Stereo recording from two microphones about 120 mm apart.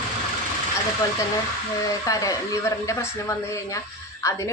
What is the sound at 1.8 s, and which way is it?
A woman's voice, 30° left (ahead or behind).